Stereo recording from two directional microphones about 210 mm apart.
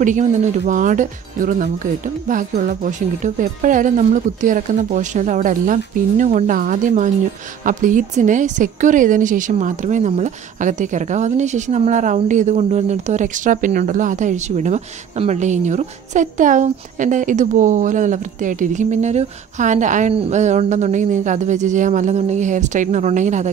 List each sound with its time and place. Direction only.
0.0 s a woman's voice: 35° right (ahead or behind)